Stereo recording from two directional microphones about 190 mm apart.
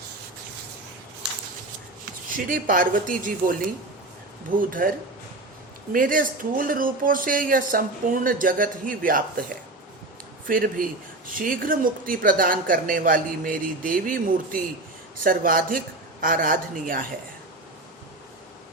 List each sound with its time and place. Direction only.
2.5 s speech: 45° right (ahead or behind)
10.5 s speech: 45° right (ahead or behind)